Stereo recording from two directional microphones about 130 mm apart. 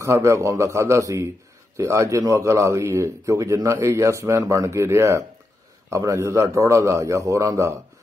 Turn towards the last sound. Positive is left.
turn(degrees=-25)  # may be behind; listen again after turning